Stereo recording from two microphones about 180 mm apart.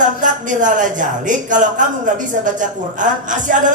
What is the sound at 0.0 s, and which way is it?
Speech, 45° right (ahead or behind).